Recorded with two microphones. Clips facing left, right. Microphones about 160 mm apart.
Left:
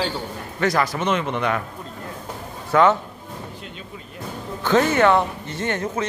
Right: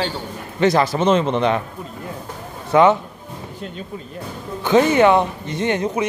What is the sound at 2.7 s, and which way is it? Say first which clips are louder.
Speech: right 3 dB; 15° right (ahead or behind).